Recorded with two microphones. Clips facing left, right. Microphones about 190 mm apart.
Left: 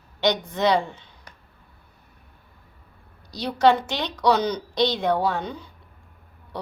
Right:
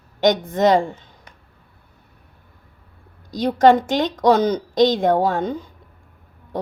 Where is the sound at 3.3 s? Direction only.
50° right (ahead or behind).